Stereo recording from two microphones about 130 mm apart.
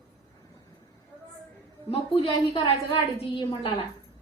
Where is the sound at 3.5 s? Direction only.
40° left (ahead or behind).